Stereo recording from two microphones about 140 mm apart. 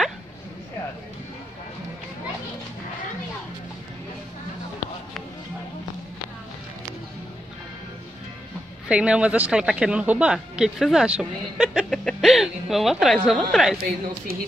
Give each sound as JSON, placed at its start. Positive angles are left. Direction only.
{"t": 8.8, "sound": "speech", "side_deg": -5}
{"t": 13.7, "sound": "speech", "side_deg": -90}